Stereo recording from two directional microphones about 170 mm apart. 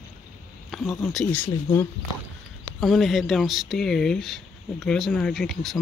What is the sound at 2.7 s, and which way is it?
Speech, centre (ahead or behind).